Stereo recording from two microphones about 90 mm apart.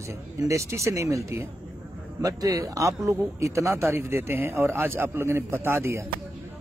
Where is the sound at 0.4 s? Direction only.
35° right (ahead or behind).